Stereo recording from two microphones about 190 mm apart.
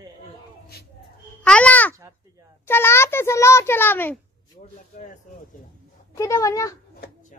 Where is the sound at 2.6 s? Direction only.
10° left (ahead or behind).